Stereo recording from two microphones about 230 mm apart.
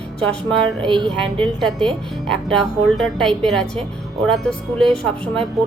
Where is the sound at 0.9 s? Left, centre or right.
Right.